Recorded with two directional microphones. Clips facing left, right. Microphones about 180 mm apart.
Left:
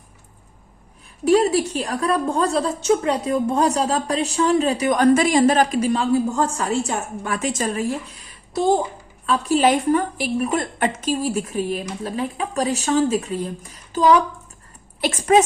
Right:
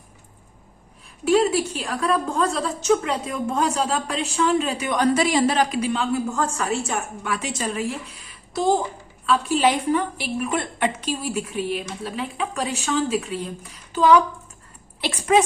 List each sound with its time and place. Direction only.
1.2 s a woman's voice: 40° left (ahead or behind)
7.3 s a woman's voice: 45° left (ahead or behind)
9.2 s a woman's voice: 40° left (ahead or behind)